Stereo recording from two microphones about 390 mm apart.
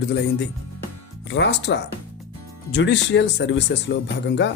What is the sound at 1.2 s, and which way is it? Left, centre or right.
Speech, left.